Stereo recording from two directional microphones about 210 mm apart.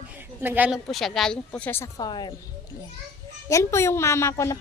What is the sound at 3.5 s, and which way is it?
Speech, 15° left (ahead or behind).